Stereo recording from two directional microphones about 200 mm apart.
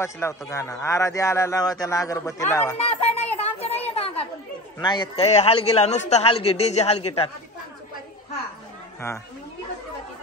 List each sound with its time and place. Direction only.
0.0 s speech: 15° left (ahead or behind)
2.8 s a sound: 35° left (ahead or behind)
4.7 s a man's voice: 20° left (ahead or behind)